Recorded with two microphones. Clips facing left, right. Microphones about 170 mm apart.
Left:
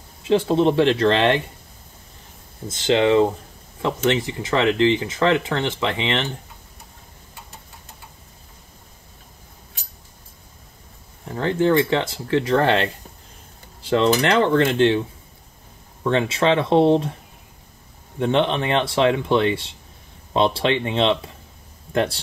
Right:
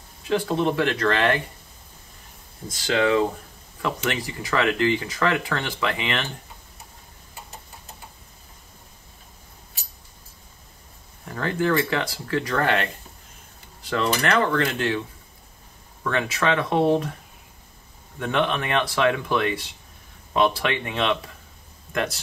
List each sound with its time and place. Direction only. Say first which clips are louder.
0.2 s speech: left 5 dB; 25° left (ahead or behind)
2.7 s speech: left 4 dB; 25° left (ahead or behind)
11.2 s speech: left 4 dB; 25° left (ahead or behind)
18.2 s speech: left 4 dB; 30° left (ahead or behind)